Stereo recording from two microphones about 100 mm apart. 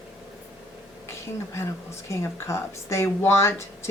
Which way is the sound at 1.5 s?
30° left (ahead or behind).